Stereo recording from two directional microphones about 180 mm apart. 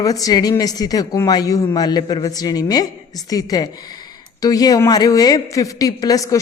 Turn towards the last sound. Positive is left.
turn(degrees=20)  # may be behind; listen again after turning